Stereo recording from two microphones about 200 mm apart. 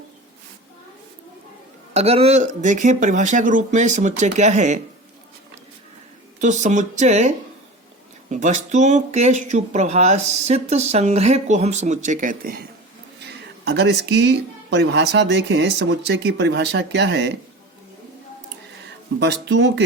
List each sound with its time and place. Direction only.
1.9 s speech: 30° right (ahead or behind)
6.4 s speech: 35° right (ahead or behind)
13.7 s speech: 60° right (ahead or behind)
19.2 s speech: 60° right (ahead or behind)